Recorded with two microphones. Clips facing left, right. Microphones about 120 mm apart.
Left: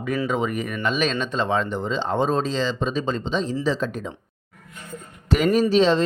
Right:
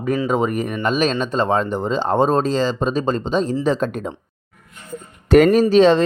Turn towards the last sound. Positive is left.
turn(degrees=-55)  # may be behind; listen again after turning